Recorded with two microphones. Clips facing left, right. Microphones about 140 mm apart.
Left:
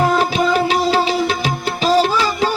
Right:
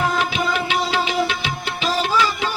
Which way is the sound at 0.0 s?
35° left (ahead or behind).